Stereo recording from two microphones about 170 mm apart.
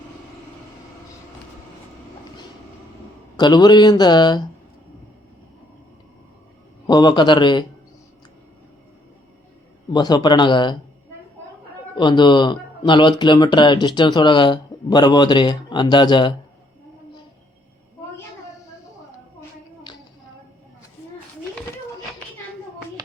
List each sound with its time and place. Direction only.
3.3 s speech: 25° left (ahead or behind)
6.8 s speech: 25° left (ahead or behind)
9.9 s speech: 25° left (ahead or behind)
11.9 s speech: 25° left (ahead or behind)